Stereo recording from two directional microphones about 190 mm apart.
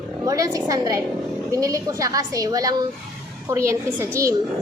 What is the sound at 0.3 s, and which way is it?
A child's voice, 15° right (ahead or behind).